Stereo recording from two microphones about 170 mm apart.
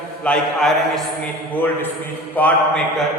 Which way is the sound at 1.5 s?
10° left (ahead or behind).